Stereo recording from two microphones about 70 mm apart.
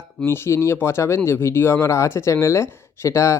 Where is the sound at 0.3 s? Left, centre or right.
Left.